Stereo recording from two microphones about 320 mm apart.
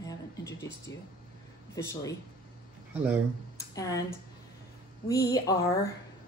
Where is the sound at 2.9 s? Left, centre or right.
Centre.